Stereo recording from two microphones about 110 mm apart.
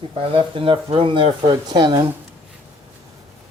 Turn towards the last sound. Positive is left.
turn(degrees=-40)  # may be behind; listen again after turning